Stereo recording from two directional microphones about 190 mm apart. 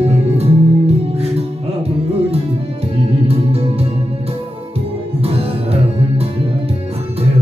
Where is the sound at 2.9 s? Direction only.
30° right (ahead or behind).